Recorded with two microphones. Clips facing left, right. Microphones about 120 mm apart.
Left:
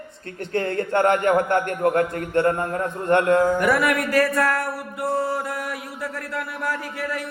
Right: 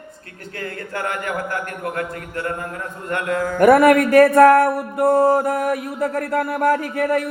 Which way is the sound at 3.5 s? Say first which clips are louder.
Right 8 dB; 50° right (ahead or behind).